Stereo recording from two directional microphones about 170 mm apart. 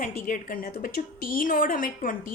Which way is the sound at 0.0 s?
50° left (ahead or behind).